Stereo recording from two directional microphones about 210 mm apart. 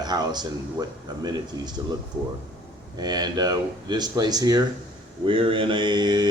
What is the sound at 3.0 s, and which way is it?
Speech, 20° right (ahead or behind).